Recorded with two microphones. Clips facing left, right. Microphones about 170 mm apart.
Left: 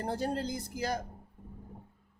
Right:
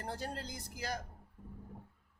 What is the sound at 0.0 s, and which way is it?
Speech, 25° left (ahead or behind).